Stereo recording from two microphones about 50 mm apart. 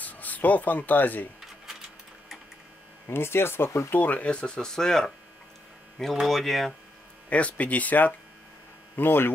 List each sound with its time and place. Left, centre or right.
0.0 s speech: left
3.1 s speech: left
3.9 s speech: left; by 5.1 s centre
6.2 s speech: centre
7.2 s speech: left
8.9 s speech: left